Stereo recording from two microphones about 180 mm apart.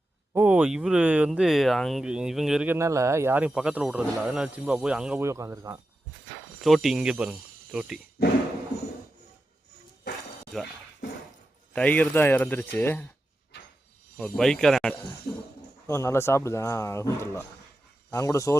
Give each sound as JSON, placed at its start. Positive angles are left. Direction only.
{"t": 0.3, "sound": "speech", "side_deg": -10}
{"t": 2.7, "sound": "speech", "side_deg": -15}
{"t": 5.2, "sound": "speech", "side_deg": -15}
{"t": 6.6, "sound": "speech", "side_deg": 0}
{"t": 11.7, "sound": "speech", "side_deg": 10}
{"t": 14.2, "sound": "speech", "side_deg": 5}
{"t": 15.9, "sound": "speech", "side_deg": 15}